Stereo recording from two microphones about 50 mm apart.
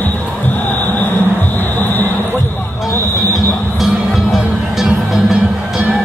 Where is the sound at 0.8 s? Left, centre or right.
Left.